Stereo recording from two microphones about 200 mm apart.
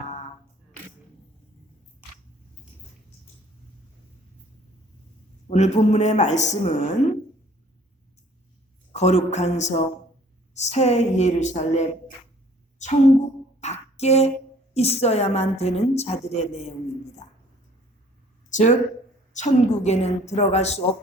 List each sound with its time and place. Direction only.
5.5 s a woman's voice: 35° left (ahead or behind)
8.9 s a woman's voice: 35° left (ahead or behind)
13.6 s a sound: 35° left (ahead or behind)
14.7 s a woman's voice: 30° left (ahead or behind)
18.4 s a woman's voice: 40° left (ahead or behind)